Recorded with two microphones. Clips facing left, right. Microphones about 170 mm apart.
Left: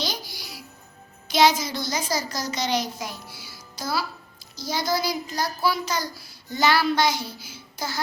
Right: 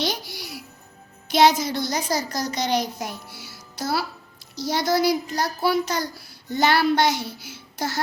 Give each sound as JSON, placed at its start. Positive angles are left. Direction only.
{"t": 0.0, "sound": "music", "side_deg": -65}
{"t": 1.3, "sound": "a child's voice", "side_deg": -60}